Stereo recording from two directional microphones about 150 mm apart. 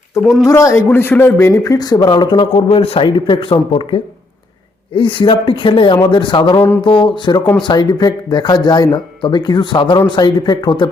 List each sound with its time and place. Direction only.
0.4 s a man's voice: 20° left (ahead or behind)